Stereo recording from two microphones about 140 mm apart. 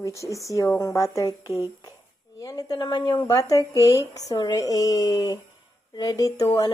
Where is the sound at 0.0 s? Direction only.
20° left (ahead or behind).